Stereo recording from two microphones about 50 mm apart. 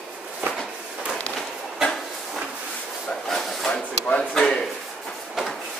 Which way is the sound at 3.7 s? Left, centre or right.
Left.